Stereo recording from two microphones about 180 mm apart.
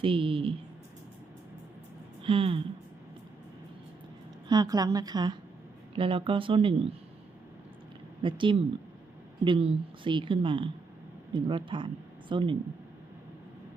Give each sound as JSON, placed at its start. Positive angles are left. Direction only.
{"t": 0.0, "sound": "a woman's voice", "side_deg": -30}
{"t": 2.2, "sound": "a woman's voice", "side_deg": -30}
{"t": 4.4, "sound": "a woman's voice", "side_deg": -20}
{"t": 8.2, "sound": "a woman's voice", "side_deg": -25}